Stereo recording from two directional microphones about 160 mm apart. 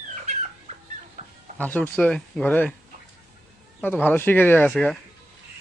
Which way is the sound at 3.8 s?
10° left (ahead or behind).